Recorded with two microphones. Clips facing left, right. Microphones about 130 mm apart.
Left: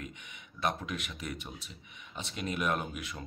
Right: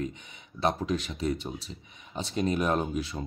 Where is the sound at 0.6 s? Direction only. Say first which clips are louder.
Right 6 dB; 35° right (ahead or behind).